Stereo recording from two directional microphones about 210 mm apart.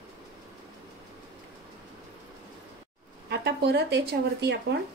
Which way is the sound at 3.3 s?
50° right (ahead or behind).